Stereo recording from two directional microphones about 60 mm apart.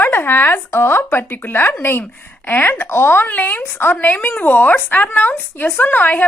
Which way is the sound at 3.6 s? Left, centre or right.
Left.